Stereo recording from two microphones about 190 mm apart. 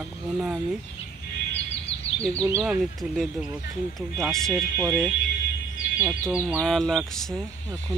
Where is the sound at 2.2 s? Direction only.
5° left (ahead or behind).